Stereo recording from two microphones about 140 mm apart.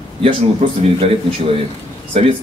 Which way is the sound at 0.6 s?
45° right (ahead or behind).